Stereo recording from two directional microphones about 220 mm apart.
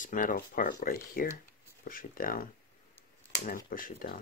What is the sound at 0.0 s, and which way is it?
Speech, 35° left (ahead or behind).